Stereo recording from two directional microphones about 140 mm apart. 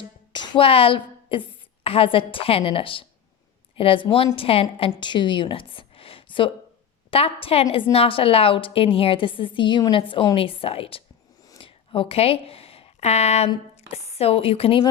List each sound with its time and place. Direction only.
0.3 s a woman's voice: 35° left (ahead or behind)
11.4 s a sound: 35° left (ahead or behind); by 13.5 s 50° left (ahead or behind)
13.9 s speech: 45° left (ahead or behind)